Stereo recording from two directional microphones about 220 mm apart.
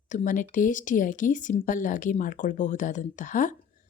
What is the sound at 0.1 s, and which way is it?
Speech, 35° left (ahead or behind).